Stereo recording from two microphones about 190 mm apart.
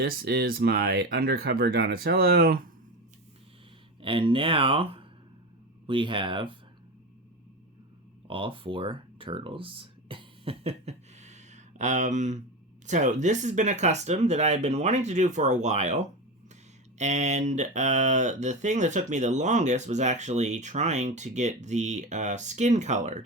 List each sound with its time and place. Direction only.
0.0 s speech: 50° right (ahead or behind)
4.0 s speech: 25° right (ahead or behind)
8.3 s speech: 25° right (ahead or behind)